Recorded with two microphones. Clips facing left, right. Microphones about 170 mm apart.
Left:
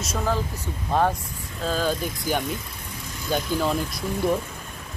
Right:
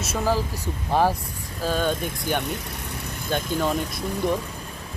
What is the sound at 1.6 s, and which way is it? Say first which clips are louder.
Speech: right 1 dB; centre (ahead or behind).